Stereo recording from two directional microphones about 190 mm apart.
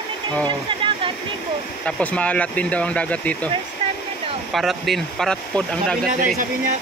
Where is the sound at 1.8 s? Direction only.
5° left (ahead or behind).